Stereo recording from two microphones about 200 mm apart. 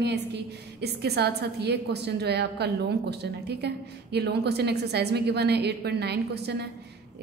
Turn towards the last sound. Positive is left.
turn(degrees=-55)  # may be behind; listen again after turning